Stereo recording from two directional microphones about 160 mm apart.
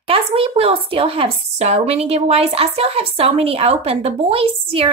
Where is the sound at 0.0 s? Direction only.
35° right (ahead or behind).